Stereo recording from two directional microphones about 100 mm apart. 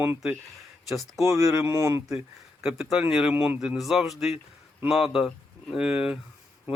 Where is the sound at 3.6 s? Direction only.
5° right (ahead or behind).